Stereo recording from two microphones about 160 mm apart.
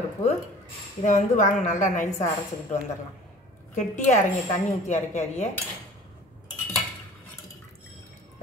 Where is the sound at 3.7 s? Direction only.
50° left (ahead or behind).